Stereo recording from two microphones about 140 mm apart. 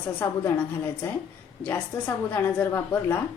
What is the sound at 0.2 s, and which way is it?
Speech, 15° left (ahead or behind).